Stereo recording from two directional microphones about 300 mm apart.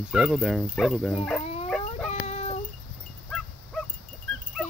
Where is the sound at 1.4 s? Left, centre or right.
Left.